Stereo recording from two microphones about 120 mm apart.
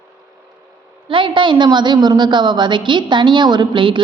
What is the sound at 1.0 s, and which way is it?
A woman's voice, 45° right (ahead or behind).